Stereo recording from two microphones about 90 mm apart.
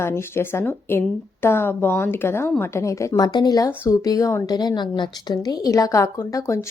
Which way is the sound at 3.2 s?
50° left (ahead or behind).